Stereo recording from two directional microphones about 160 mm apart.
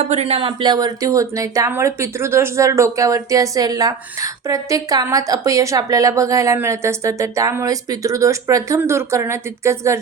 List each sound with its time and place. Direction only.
0.0 s speech: 45° right (ahead or behind); by 10.0 s 15° right (ahead or behind)